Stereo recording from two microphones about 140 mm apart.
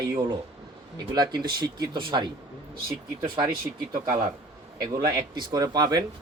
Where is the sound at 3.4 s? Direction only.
30° right (ahead or behind).